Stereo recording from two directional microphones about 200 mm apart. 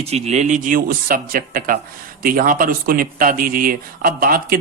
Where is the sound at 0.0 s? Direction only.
35° right (ahead or behind).